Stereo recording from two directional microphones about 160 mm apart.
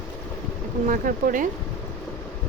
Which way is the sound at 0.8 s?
55° right (ahead or behind).